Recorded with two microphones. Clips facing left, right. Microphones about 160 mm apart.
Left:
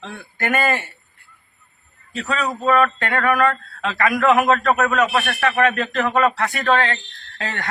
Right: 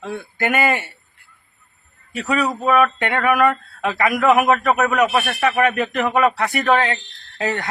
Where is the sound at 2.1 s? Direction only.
15° right (ahead or behind).